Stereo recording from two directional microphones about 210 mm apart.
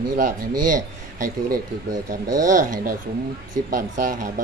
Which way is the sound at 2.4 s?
40° right (ahead or behind).